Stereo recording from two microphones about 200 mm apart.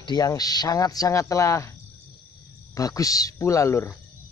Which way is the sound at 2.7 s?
15° left (ahead or behind).